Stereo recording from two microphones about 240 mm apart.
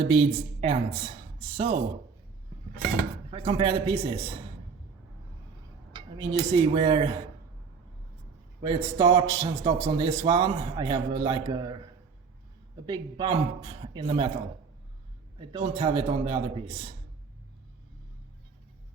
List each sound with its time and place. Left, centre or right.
0.1 s a man's voice: right
3.2 s a man's voice: right
5.9 s speech: centre
8.6 s a man's voice: centre
12.8 s a man's voice: centre
15.4 s a man's voice: right